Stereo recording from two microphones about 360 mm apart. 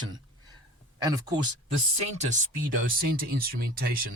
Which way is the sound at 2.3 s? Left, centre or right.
Right.